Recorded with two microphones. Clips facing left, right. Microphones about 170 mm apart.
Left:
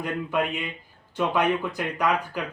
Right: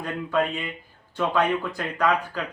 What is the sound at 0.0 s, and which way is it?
Speech, 15° left (ahead or behind).